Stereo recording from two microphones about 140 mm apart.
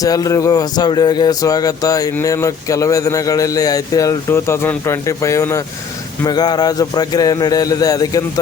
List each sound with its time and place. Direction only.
0.0 s speech: 25° left (ahead or behind)